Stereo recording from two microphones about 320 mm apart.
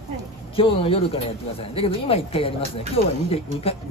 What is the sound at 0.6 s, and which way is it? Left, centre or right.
Speech, centre.